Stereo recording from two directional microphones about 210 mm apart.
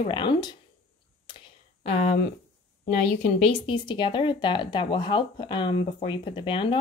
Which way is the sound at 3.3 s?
25° left (ahead or behind).